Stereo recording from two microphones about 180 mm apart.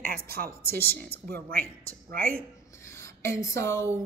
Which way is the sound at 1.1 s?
60° right (ahead or behind).